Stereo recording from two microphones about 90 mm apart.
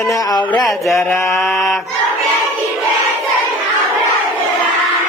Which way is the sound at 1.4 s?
Centre (ahead or behind).